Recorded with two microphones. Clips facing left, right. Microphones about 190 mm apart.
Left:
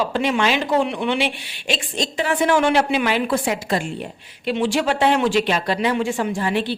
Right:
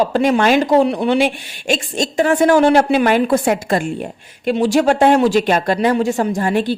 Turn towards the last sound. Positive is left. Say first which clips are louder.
# right 5 dB
turn(degrees=-45)  # may be behind; listen again after turning